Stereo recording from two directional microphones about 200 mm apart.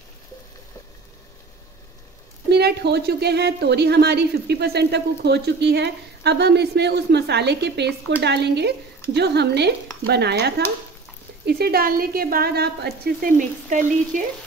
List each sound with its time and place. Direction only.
2.5 s a woman's voice: 55° right (ahead or behind); by 14.2 s 40° right (ahead or behind)